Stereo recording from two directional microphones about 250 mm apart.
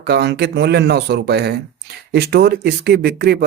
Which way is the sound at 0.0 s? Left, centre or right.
Right.